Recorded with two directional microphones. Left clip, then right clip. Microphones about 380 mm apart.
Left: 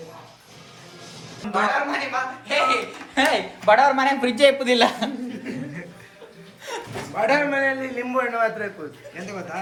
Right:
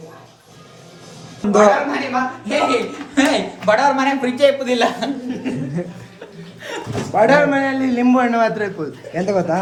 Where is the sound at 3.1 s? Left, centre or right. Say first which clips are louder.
Right 3 dB; centre.